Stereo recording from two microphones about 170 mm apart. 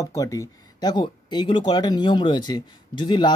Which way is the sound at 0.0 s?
20° left (ahead or behind).